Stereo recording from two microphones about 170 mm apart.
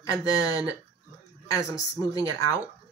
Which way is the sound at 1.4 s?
20° left (ahead or behind).